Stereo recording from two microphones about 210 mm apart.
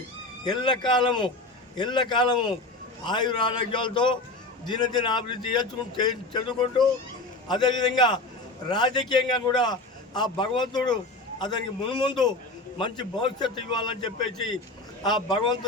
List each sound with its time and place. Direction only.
0.4 s speech: 20° left (ahead or behind)